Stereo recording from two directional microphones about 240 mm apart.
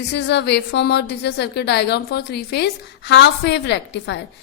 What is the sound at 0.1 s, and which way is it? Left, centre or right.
A woman's voice, left.